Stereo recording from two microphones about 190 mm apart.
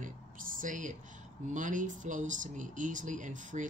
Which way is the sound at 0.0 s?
45° right (ahead or behind).